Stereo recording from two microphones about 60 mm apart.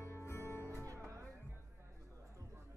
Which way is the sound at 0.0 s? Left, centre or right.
Left.